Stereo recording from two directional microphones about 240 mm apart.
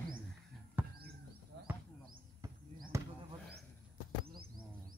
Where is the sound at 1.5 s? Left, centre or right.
Right.